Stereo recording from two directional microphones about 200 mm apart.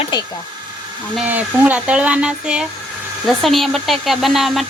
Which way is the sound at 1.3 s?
10° right (ahead or behind).